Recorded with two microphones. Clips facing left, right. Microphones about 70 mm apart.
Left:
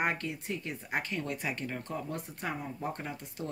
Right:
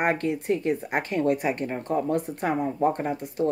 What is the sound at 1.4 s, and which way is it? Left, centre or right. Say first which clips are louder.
Speech: right 9 dB; right.